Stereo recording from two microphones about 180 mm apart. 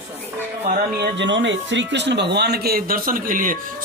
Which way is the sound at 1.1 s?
85° right.